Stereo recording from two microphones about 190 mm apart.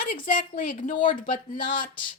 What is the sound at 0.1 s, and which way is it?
Speech, 45° left (ahead or behind).